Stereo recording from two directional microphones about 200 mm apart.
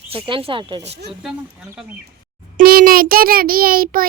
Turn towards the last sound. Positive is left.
turn(degrees=-45)  # may be behind; listen again after turning